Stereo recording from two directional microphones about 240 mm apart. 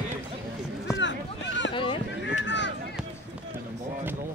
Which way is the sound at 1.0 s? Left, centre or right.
Left.